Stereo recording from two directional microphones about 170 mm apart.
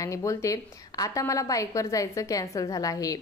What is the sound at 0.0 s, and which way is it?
A woman's voice, 20° left (ahead or behind).